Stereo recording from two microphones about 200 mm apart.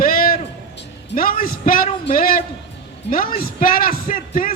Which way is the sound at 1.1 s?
45° left (ahead or behind).